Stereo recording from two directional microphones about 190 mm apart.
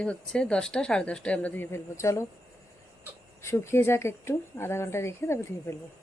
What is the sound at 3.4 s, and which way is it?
Speech, 15° left (ahead or behind).